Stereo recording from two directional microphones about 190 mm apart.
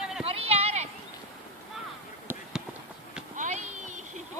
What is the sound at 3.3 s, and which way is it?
Clip-clop, 40° right (ahead or behind).